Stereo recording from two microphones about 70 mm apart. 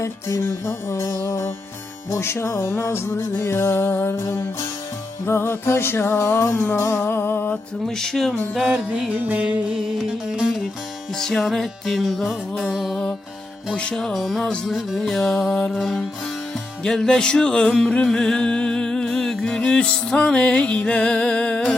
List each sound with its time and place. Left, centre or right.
0.0 s music: left
7.0 s music: left
7.9 s music: centre
9.1 s music: right
11.2 s music: centre